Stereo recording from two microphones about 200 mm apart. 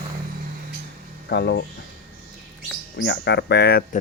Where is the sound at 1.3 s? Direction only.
55° left (ahead or behind).